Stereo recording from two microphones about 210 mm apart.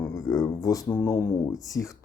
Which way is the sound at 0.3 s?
15° left (ahead or behind).